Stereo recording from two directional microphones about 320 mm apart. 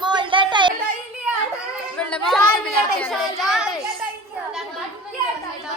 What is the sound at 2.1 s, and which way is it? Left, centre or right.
A woman's voice, centre.